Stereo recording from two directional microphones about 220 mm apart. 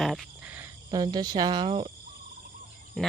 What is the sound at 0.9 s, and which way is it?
Speech, 20° right (ahead or behind).